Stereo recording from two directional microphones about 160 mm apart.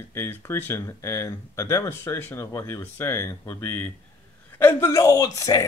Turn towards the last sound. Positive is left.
turn(degrees=20)  # may be behind; listen again after turning